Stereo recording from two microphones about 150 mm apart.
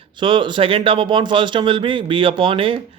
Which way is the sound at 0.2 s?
35° right (ahead or behind).